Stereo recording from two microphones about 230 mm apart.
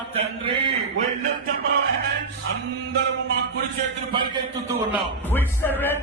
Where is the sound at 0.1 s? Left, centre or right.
Right.